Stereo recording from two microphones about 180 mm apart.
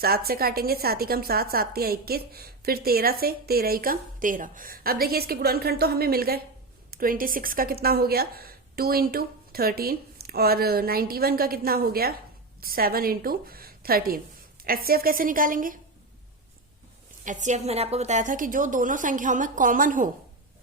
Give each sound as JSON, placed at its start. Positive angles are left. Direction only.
{"t": 0.0, "sound": "a woman's voice", "side_deg": -60}
{"t": 17.2, "sound": "a woman's voice", "side_deg": -40}